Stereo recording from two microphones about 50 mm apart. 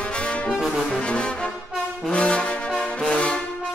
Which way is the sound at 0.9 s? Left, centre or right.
Left.